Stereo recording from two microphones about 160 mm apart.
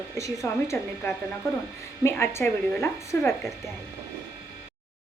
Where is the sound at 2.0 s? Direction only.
15° left (ahead or behind).